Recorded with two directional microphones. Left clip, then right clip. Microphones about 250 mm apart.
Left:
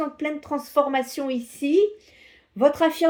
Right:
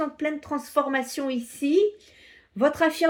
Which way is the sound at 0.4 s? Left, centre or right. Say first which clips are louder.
Left 5 dB; centre.